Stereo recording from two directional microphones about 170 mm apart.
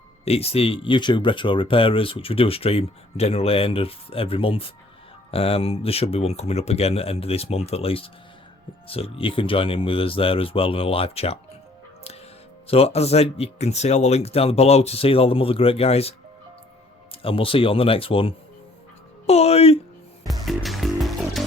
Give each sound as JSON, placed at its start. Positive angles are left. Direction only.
{"t": 0.3, "sound": "speech", "side_deg": 35}
{"t": 12.6, "sound": "speech", "side_deg": 35}
{"t": 20.4, "sound": "music", "side_deg": 0}